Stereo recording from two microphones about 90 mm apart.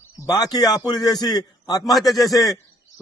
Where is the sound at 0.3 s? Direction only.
45° left (ahead or behind).